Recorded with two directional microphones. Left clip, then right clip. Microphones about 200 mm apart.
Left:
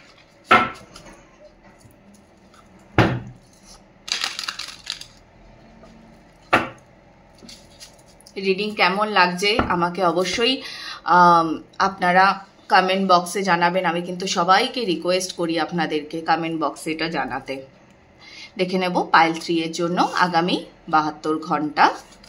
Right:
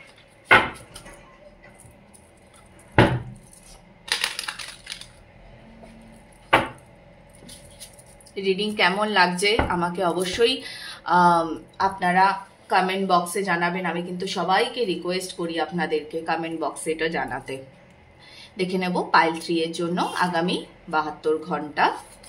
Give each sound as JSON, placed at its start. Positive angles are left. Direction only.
{"t": 8.4, "sound": "speech", "side_deg": 15}